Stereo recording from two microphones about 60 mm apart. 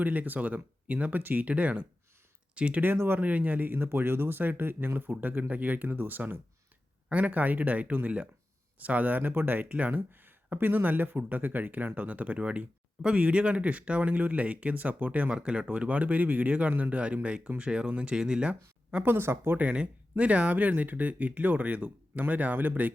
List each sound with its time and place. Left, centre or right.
0.0 s speech: right
2.8 s speech: right
3.2 s speech: right
15.3 s speech: centre
19.0 s speech: right
19.5 s speech: right